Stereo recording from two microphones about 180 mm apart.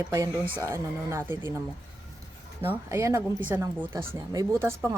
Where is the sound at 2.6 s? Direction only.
15° right (ahead or behind).